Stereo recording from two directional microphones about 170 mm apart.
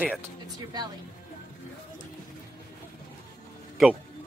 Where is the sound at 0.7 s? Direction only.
25° right (ahead or behind).